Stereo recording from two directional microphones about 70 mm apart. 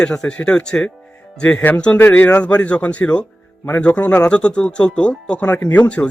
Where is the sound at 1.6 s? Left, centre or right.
Left.